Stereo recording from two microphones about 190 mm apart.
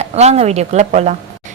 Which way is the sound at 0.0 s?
35° right (ahead or behind).